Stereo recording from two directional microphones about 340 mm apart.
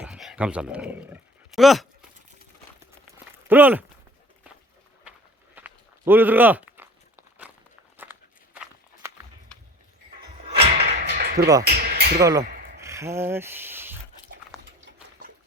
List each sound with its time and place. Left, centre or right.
0.0 s roaring cats: centre
3.5 s speech: centre
5.5 s walk: centre
8.5 s walk: centre
10.6 s music: centre
11.1 s a sound: right
12.2 s speech: centre
12.8 s a sound: centre